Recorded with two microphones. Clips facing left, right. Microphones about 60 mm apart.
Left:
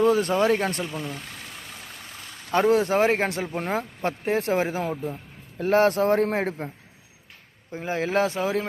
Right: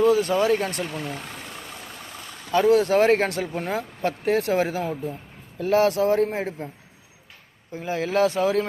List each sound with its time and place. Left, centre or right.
0.1 s speech: left
0.9 s speech: right
2.5 s speech: left
3.0 s speech: centre
5.5 s speech: left
6.2 s a man's voice: left
7.7 s speech: left